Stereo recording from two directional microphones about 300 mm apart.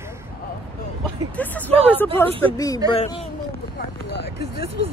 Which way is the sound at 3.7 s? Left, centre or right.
Left.